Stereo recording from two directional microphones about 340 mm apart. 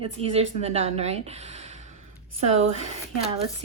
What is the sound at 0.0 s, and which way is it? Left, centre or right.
Speech, centre.